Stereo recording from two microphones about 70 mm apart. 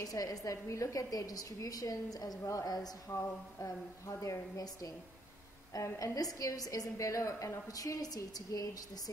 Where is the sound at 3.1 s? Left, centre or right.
Left.